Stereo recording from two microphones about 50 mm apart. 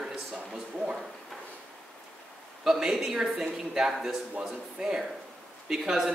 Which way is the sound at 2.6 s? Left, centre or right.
Centre.